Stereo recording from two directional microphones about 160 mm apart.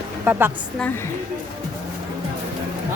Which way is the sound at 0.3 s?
15° right (ahead or behind).